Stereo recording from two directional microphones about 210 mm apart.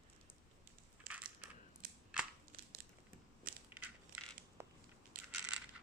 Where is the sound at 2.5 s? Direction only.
45° right (ahead or behind).